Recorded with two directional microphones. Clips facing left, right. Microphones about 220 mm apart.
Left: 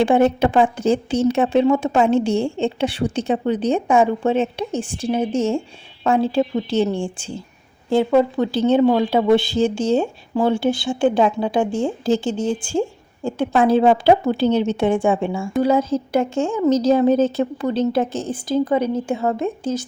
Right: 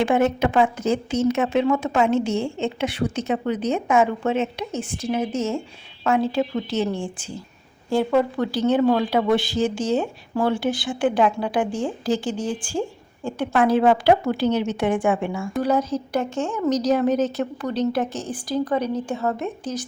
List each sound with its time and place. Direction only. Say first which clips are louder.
0.0 s a woman's voice: left 4 dB; 30° left (ahead or behind)